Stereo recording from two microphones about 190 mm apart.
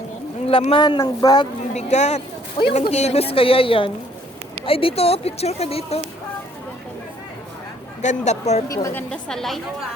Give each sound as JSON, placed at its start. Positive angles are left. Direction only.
{"t": 0.4, "sound": "speech", "side_deg": 30}
{"t": 1.7, "sound": "a woman's voice", "side_deg": 35}
{"t": 8.0, "sound": "a woman's voice", "side_deg": 35}
{"t": 8.7, "sound": "a woman's voice", "side_deg": 15}